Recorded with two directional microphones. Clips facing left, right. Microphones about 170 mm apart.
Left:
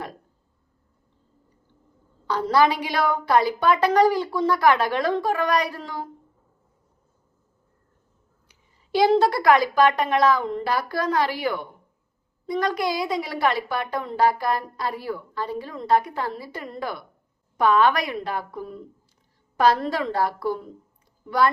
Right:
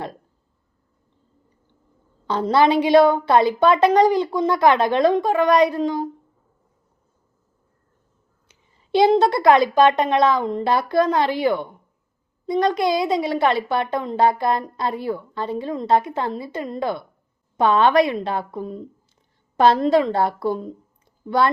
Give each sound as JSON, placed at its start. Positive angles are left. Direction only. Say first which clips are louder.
{"t": 2.2, "sound": "a woman's voice", "louder": "right 3 dB", "side_deg": -25}
{"t": 8.4, "sound": "a woman's voice", "louder": "right 8 dB", "side_deg": -25}